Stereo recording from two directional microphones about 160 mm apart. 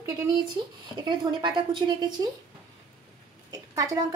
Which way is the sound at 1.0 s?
30° right (ahead or behind).